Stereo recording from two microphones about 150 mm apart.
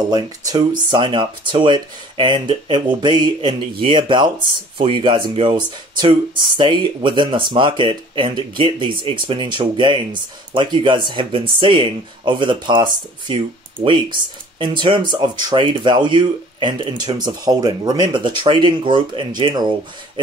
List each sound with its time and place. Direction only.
0.1 s speech: 30° right (ahead or behind)
14.6 s speech: 35° right (ahead or behind)